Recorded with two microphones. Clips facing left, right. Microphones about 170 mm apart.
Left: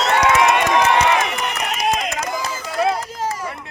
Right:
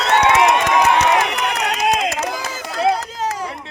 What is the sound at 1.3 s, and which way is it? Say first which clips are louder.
Run: right 3 dB; 75° right (ahead or behind).